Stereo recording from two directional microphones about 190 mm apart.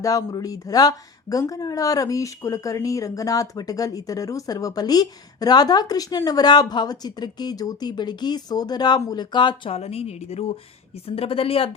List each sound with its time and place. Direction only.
0.0 s speech: 20° left (ahead or behind)